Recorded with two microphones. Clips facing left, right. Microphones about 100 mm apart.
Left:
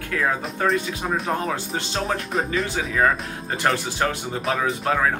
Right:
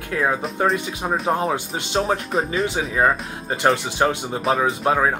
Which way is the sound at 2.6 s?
20° right (ahead or behind).